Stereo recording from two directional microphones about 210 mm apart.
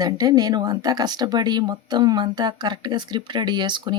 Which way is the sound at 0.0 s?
20° right (ahead or behind).